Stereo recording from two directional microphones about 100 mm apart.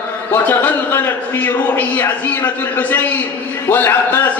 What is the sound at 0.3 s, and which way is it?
A man's voice, 15° left (ahead or behind).